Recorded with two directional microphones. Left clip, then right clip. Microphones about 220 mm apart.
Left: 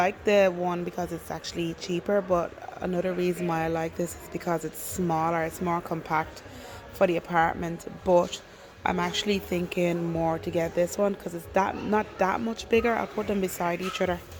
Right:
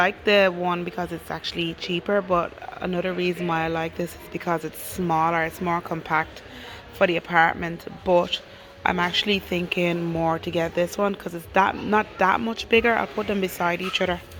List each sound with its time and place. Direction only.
0.0 s speech: centre (ahead or behind)
8.8 s speech: 5° left (ahead or behind)